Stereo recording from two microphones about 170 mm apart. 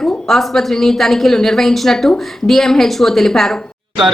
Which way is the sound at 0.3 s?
Centre (ahead or behind).